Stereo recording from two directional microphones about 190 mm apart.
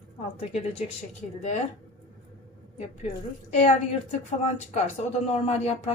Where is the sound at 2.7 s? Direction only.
35° left (ahead or behind).